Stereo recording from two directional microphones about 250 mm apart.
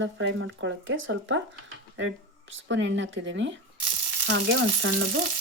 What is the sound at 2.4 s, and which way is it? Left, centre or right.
Speech, right.